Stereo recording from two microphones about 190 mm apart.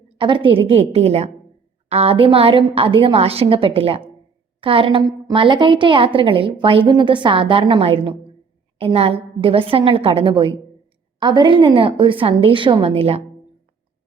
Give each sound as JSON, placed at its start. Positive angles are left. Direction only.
{"t": 0.2, "sound": "a woman's voice", "side_deg": -25}